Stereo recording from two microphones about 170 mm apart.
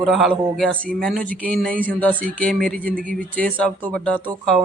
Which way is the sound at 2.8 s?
55° right (ahead or behind).